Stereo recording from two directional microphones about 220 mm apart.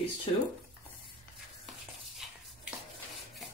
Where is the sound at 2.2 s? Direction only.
Centre (ahead or behind).